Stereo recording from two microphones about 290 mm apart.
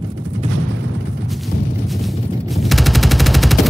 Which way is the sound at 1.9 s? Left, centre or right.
Centre.